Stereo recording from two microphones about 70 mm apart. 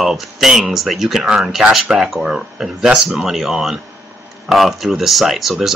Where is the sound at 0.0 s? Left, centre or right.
Centre.